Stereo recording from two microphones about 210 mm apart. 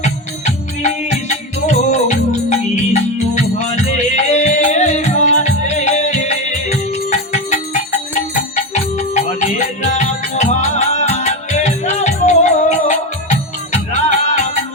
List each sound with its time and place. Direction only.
0.0 s music: 35° left (ahead or behind)
4.1 s music: 35° left (ahead or behind)